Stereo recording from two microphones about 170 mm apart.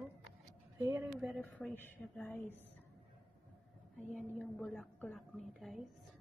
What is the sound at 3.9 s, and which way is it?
A woman's voice, centre (ahead or behind).